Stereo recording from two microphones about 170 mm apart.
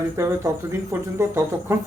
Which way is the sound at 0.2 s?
15° right (ahead or behind).